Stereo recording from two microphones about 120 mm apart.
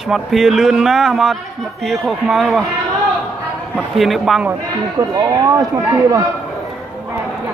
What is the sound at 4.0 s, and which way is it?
Speech, centre (ahead or behind).